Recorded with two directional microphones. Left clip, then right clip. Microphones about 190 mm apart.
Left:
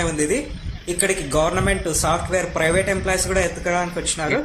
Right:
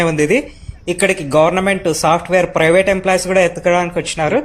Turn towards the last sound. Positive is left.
turn(degrees=-35)  # may be behind; listen again after turning